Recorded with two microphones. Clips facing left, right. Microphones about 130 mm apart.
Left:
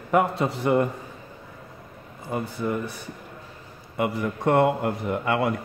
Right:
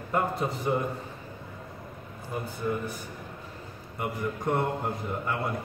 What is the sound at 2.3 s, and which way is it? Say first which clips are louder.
A man's voice: left 4 dB; 90° left.